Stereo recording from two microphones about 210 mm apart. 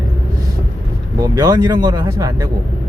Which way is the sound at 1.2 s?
20° right (ahead or behind).